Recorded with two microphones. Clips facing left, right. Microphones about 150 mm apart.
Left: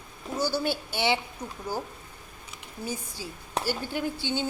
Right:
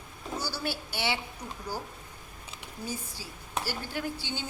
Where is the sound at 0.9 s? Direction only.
20° left (ahead or behind).